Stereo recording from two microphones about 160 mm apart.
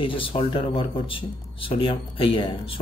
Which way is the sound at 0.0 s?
35° left (ahead or behind).